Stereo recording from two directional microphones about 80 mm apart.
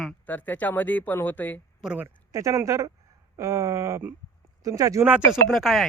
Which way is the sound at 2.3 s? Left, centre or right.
Right.